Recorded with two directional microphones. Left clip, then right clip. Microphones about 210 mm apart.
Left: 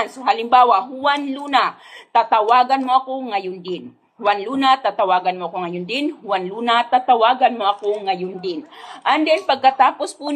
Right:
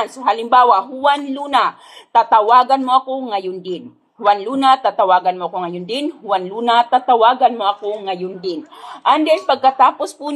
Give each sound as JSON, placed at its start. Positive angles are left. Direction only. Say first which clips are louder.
{"t": 0.0, "sound": "a man's voice", "louder": "right 2 dB", "side_deg": -30}